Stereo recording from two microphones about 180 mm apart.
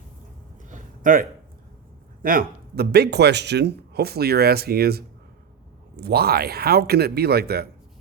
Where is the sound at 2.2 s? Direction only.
50° right (ahead or behind).